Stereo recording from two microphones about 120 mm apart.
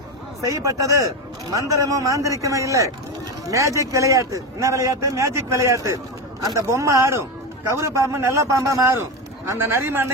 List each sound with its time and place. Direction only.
0.5 s a man's voice: 30° right (ahead or behind)